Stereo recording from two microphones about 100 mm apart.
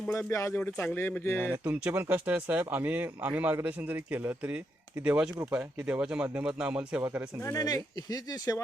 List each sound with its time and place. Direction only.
0.1 s speech: 30° left (ahead or behind)
1.5 s speech: 15° right (ahead or behind)
5.4 s speech: 25° right (ahead or behind)
7.4 s speech: 40° left (ahead or behind)